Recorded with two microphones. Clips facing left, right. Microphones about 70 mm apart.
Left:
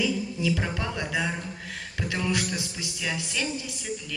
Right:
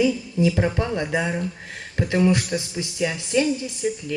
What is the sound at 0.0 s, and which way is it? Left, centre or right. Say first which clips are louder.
Speech: right 7 dB; right.